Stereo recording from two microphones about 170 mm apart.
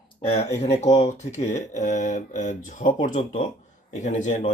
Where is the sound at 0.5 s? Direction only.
40° left (ahead or behind).